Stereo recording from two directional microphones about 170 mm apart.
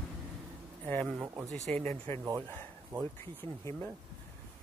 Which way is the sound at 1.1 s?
15° right (ahead or behind).